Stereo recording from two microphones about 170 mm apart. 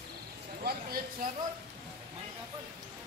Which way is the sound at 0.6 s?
65° right (ahead or behind).